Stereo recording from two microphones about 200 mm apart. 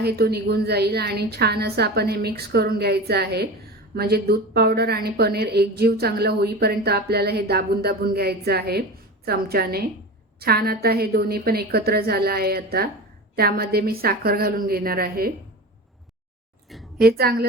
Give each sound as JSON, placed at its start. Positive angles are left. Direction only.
{"t": 0.0, "sound": "speech", "side_deg": -55}
{"t": 17.0, "sound": "speech", "side_deg": -50}